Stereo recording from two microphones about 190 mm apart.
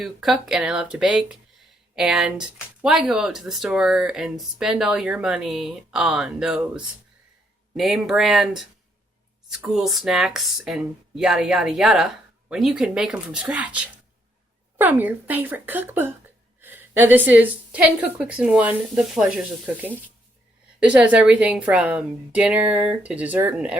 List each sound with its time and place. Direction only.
0.0 s a woman's voice: centre (ahead or behind)